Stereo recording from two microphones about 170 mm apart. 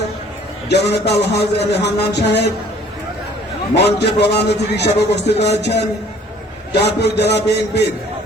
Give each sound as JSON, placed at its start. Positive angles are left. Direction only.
{"t": 0.7, "sound": "a man's voice", "side_deg": 80}
{"t": 3.8, "sound": "a man's voice", "side_deg": 80}